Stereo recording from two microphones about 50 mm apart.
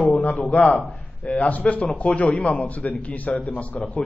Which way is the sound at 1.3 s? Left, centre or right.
Left.